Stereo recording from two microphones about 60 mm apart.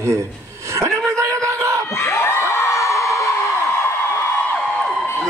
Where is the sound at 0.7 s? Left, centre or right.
Right.